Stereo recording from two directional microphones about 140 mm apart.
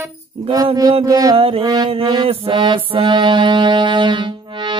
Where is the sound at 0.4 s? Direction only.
40° right (ahead or behind).